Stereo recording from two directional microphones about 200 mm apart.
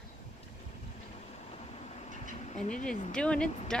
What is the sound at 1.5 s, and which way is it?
Vehicle, 30° left (ahead or behind).